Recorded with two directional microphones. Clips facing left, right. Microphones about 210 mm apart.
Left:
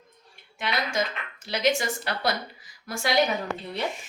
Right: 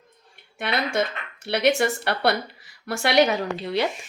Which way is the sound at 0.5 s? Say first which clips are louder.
Right 4 dB; 60° right (ahead or behind).